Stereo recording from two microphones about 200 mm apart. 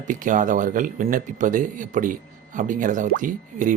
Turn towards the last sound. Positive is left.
turn(degrees=-40)  # may be behind; listen again after turning